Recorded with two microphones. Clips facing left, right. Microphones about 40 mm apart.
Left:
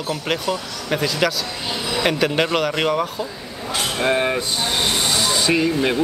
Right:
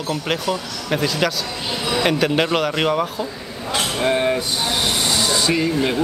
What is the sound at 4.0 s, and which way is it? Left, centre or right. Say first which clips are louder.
Speech: even; centre.